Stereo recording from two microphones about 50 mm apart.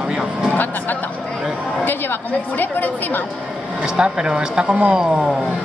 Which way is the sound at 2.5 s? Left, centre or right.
Left.